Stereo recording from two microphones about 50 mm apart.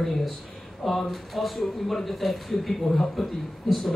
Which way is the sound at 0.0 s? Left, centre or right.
Centre.